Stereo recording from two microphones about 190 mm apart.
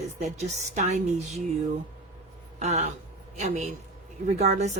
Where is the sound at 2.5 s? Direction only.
35° right (ahead or behind).